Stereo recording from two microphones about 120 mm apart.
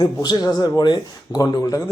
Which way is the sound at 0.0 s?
35° left (ahead or behind).